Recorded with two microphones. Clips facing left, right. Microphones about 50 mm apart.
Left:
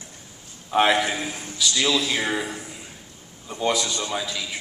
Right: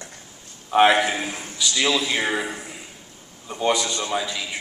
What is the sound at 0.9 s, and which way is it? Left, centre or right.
A man's voice, centre.